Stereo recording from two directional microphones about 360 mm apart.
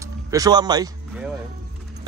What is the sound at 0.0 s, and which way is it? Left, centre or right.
Speech, centre.